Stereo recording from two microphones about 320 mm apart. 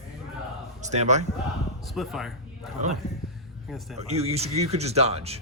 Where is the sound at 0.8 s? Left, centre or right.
Right.